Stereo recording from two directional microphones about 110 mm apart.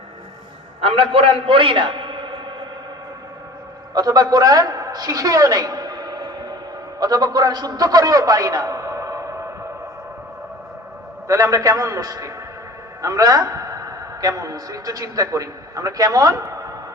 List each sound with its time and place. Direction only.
0.8 s a man's voice: 60° right (ahead or behind)
3.9 s a sound: 35° right (ahead or behind)
7.0 s a man's voice: 40° right (ahead or behind)
11.3 s a man's voice: 30° right (ahead or behind)